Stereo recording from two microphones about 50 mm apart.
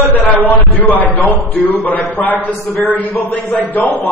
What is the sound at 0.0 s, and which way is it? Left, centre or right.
A man's voice, left.